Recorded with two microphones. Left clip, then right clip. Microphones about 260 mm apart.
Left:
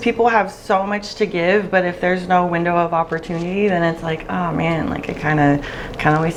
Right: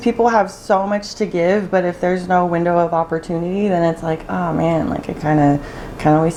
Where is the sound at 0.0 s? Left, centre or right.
Left.